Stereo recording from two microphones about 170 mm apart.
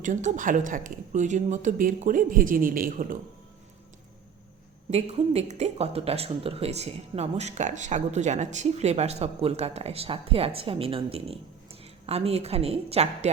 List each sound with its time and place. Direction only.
0.0 s speech: 45° right (ahead or behind)
4.9 s speech: 40° right (ahead or behind)